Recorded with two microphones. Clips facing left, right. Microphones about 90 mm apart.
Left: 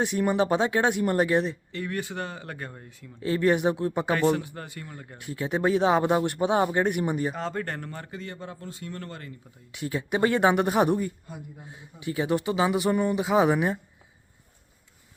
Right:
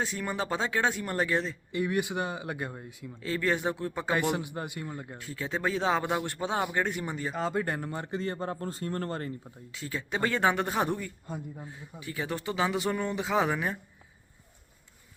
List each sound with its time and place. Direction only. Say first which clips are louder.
0.0 s speech: left 8 dB; 20° left (ahead or behind)
1.7 s speech: right 3 dB; 15° right (ahead or behind)
3.2 s speech: left 6 dB; 20° left (ahead or behind)
4.1 s speech: left 4 dB; 15° right (ahead or behind)
5.1 s speech: left 7 dB; 20° left (ahead or behind)
7.3 s speech: right 1 dB; 5° right (ahead or behind)
8.2 s a man's voice: right 5 dB; 40° right (ahead or behind)
9.7 s a man's voice: left 6 dB; 20° left (ahead or behind)